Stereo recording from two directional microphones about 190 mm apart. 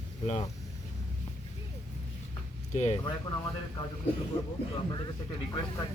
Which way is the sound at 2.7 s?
35° left (ahead or behind).